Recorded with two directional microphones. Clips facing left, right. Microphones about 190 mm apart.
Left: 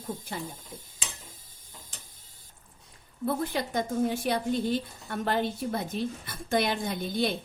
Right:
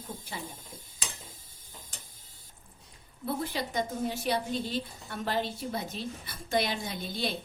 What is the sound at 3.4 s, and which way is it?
A woman's voice, 50° left (ahead or behind).